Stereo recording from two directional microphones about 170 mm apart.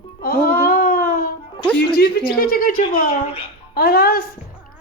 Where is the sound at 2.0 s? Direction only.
65° left (ahead or behind).